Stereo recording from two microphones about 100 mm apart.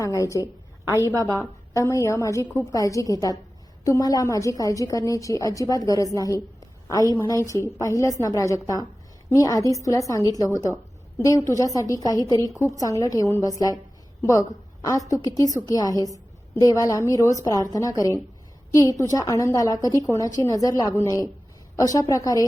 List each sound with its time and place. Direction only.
0.0 s a woman's voice: 30° left (ahead or behind)
7.1 s a woman's voice: 35° left (ahead or behind)